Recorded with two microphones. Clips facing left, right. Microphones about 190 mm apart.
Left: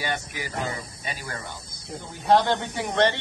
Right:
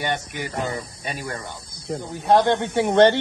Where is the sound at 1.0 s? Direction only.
25° right (ahead or behind).